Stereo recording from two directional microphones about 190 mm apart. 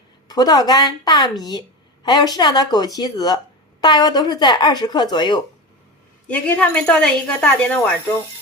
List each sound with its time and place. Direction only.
0.3 s speech: 20° left (ahead or behind)
6.2 s a woman's voice: 5° left (ahead or behind)